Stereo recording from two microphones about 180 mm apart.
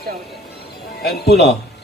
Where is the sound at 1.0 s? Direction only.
60° left (ahead or behind).